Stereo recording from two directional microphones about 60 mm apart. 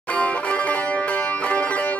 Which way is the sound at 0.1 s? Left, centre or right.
Left.